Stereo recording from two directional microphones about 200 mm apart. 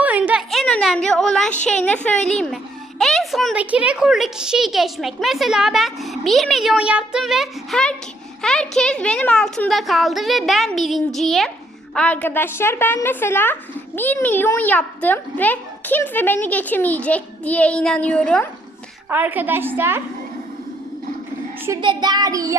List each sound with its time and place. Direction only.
0.0 s a sound: 5° right (ahead or behind)
1.6 s a woman's voice: 5° left (ahead or behind)
19.0 s a woman's voice: 10° right (ahead or behind)
21.7 s child singing: 20° right (ahead or behind)